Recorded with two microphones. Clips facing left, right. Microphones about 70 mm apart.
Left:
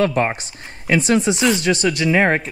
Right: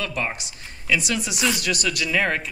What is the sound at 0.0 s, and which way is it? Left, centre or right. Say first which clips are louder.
Speech: left 10 dB; left.